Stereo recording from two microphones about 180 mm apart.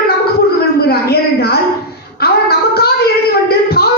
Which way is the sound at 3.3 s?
60° left (ahead or behind).